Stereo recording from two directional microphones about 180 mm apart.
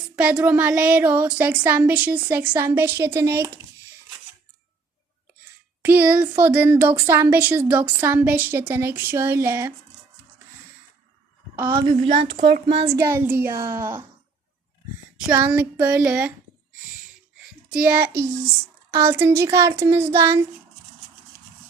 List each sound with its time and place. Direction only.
0.2 s speech: 5° right (ahead or behind)
5.8 s speech: 10° right (ahead or behind)
11.7 s a woman's voice: 30° right (ahead or behind)
12.9 s speech: 15° right (ahead or behind)
15.3 s speech: 10° right (ahead or behind)
17.7 s a child's voice: 10° right (ahead or behind)